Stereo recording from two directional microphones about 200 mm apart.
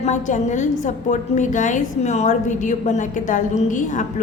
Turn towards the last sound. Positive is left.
turn(degrees=40)  # may be behind; listen again after turning